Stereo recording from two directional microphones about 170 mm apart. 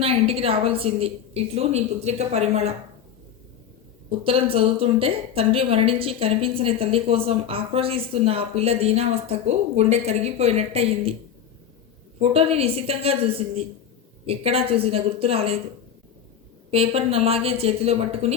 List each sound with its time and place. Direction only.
0.0 s a woman's voice: 35° right (ahead or behind)
4.2 s a woman's voice: 35° right (ahead or behind)
12.2 s a woman's voice: 35° right (ahead or behind)
16.7 s a woman's voice: 35° right (ahead or behind)